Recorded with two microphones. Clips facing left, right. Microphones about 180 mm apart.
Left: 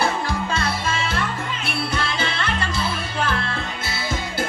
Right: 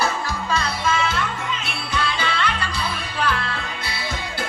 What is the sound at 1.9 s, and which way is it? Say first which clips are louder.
Music: right 1 dB; 45° left (ahead or behind).